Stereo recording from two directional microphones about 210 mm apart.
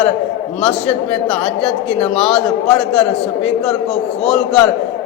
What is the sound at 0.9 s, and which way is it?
A man's voice, 5° left (ahead or behind).